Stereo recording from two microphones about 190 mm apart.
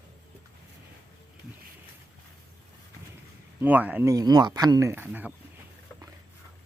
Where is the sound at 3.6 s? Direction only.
10° right (ahead or behind).